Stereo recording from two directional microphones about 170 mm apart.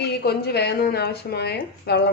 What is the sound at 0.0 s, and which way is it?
A woman's voice, 70° left (ahead or behind).